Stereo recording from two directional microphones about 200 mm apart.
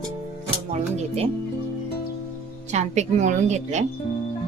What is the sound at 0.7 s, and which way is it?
Music, 30° right (ahead or behind).